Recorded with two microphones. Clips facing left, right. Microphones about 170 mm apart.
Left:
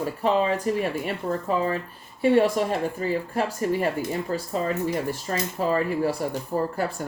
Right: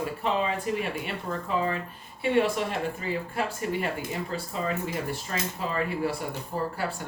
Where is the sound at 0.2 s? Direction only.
40° left (ahead or behind).